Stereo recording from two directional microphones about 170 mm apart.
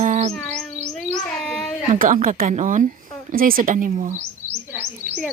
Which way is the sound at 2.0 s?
50° right (ahead or behind).